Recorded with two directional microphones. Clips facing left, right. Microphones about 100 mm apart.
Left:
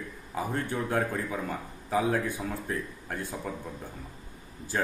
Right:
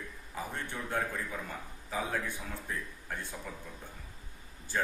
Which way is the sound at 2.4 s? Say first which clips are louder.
Left 7 dB; 50° left (ahead or behind).